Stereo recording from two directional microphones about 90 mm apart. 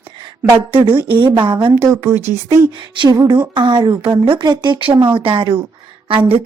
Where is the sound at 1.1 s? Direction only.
65° right (ahead or behind).